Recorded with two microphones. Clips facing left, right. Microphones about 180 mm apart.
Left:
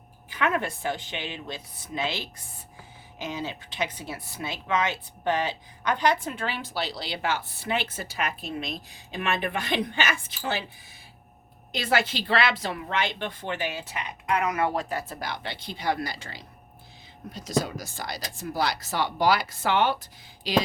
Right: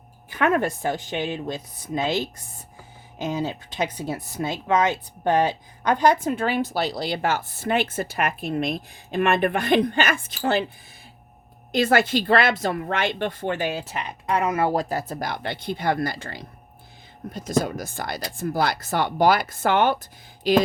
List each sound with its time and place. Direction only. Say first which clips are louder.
0.3 s speech: right 6 dB; 45° right (ahead or behind)
11.7 s speech: right 7 dB; 50° right (ahead or behind)